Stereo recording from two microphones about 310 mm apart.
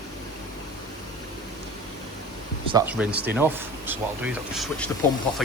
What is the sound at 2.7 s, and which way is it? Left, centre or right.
Speech, centre.